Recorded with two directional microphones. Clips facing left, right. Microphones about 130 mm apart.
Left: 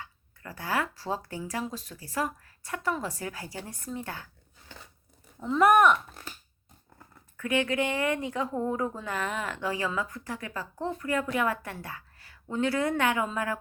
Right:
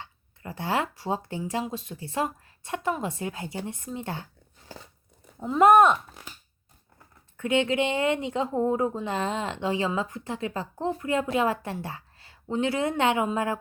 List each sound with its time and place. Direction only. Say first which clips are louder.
0.0 s speech: right 3 dB; 25° right (ahead or behind)
5.5 s speech: right 3 dB; 25° right (ahead or behind)
7.3 s speech: right 3 dB; 25° right (ahead or behind)